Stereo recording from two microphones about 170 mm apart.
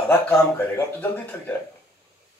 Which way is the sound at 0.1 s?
15° left (ahead or behind).